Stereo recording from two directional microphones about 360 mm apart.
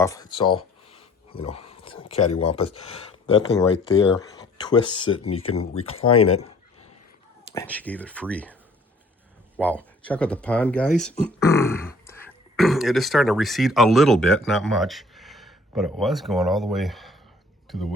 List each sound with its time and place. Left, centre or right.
0.0 s speech: centre
5.5 s speech: left
6.3 s a sound: centre
7.5 s speech: centre
9.6 s speech: centre